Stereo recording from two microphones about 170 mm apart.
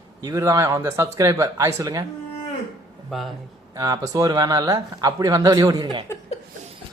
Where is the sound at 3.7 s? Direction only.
20° right (ahead or behind).